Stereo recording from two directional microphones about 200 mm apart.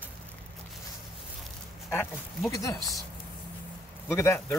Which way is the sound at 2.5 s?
15° left (ahead or behind).